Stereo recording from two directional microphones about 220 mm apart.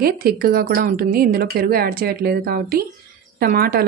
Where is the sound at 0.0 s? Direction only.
40° right (ahead or behind).